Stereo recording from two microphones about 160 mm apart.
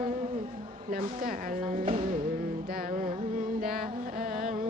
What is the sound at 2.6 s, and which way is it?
Music, 65° right (ahead or behind).